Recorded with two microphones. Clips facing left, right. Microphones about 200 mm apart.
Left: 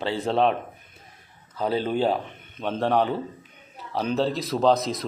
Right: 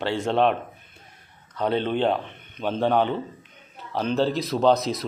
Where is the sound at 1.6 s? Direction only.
5° left (ahead or behind).